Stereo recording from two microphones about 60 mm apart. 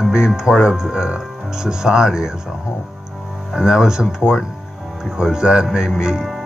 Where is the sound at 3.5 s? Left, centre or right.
Centre.